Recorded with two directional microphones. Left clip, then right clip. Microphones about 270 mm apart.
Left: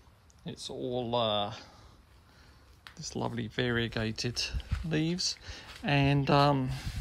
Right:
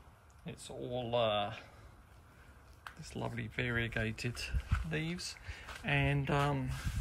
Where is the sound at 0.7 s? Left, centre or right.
Left.